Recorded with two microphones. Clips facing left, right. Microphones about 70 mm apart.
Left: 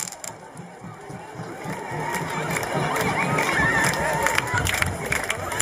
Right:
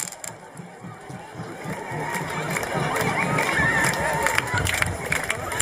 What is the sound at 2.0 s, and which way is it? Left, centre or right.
Crowd, centre.